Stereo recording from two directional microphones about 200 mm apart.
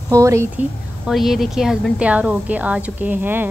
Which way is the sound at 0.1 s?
15° right (ahead or behind).